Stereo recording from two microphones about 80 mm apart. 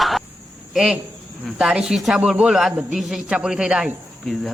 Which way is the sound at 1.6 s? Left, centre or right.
Centre.